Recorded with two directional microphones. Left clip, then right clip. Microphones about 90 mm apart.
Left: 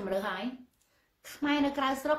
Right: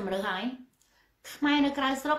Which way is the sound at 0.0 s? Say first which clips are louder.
Right 2 dB; 20° right (ahead or behind).